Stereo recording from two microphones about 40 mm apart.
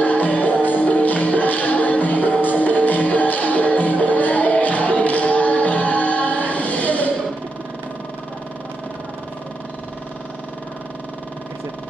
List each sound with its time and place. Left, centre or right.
0.0 s music: left